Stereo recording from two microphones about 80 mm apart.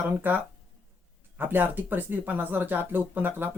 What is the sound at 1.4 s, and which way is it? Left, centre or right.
Speech, right.